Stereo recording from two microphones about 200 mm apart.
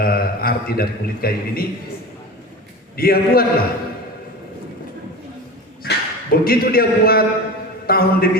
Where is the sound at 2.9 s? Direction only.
50° left (ahead or behind).